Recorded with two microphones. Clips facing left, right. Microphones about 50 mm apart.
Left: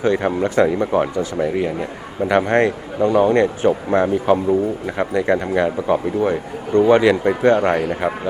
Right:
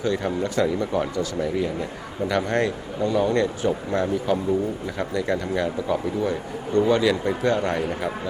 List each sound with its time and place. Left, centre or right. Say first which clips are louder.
0.0 s speech: left 6 dB; left